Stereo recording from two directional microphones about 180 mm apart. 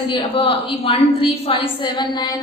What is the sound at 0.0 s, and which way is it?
A woman's voice, 30° left (ahead or behind).